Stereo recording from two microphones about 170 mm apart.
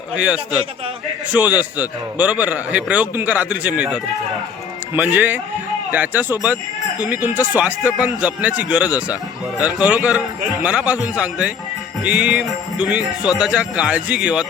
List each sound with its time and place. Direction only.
1.3 s a man's voice: 10° right (ahead or behind)
13.0 s speech: 20° left (ahead or behind)
13.4 s speech: 5° right (ahead or behind)